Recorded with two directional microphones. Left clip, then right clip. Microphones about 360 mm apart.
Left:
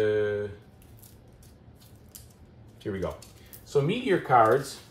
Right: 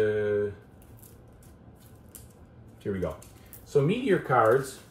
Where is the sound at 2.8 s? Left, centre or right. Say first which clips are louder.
Right 1 dB; centre.